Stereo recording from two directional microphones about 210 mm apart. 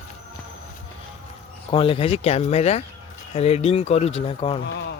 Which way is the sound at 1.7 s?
25° left (ahead or behind).